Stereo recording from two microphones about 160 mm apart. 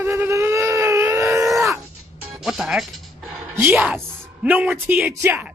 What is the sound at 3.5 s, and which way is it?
Speech, 15° right (ahead or behind).